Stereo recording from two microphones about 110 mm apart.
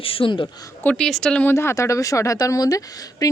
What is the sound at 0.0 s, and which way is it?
Speech, 55° left (ahead or behind).